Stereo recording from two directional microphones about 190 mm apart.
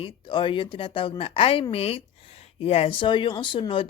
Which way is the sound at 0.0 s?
25° left (ahead or behind).